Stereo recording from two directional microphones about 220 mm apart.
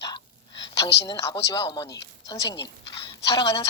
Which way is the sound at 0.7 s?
15° left (ahead or behind).